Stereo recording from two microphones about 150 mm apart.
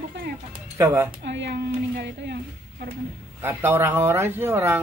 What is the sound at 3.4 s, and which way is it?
Speech, 15° right (ahead or behind).